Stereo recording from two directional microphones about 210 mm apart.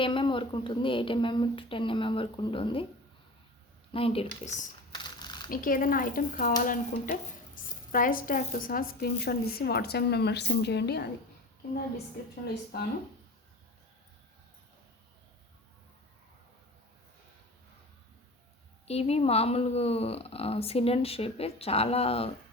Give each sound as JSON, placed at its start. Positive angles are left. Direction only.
{"t": 0.0, "sound": "speech", "side_deg": 25}
{"t": 3.9, "sound": "speech", "side_deg": 25}
{"t": 5.2, "sound": "mechanisms", "side_deg": 20}
{"t": 5.5, "sound": "a woman's voice", "side_deg": 40}
{"t": 12.7, "sound": "a woman's voice", "side_deg": 50}
{"t": 18.9, "sound": "speech", "side_deg": 30}